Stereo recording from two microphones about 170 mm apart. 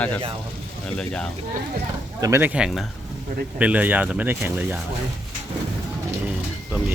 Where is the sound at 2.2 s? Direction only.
15° right (ahead or behind).